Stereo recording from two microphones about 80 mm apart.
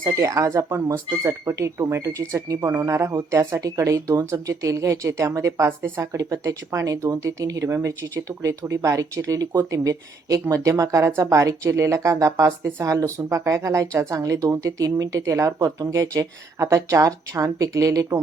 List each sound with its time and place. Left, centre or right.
0.0 s speech: right
6.1 s speech: right
9.6 s speech: right